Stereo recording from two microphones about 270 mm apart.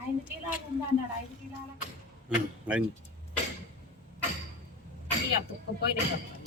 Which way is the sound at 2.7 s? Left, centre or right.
Centre.